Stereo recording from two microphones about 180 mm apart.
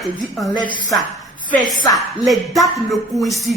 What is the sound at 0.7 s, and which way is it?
Speech, 20° left (ahead or behind).